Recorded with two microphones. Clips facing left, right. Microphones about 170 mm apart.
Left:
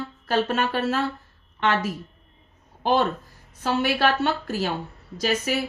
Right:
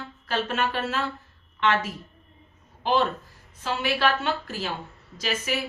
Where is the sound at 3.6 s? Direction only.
40° left (ahead or behind).